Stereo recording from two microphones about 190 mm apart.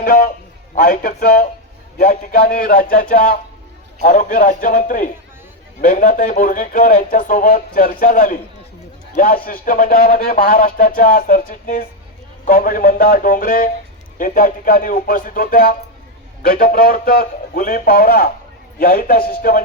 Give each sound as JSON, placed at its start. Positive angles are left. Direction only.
{"t": 0.0, "sound": "a man's voice", "side_deg": 50}